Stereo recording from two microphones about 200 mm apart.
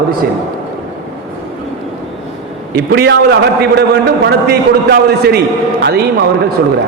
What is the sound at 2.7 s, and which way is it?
A man's voice, 50° right (ahead or behind).